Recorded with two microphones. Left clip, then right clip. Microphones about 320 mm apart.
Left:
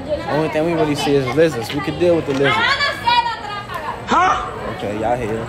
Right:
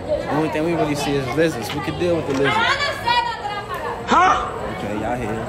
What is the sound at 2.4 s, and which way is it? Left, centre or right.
Chatter, centre.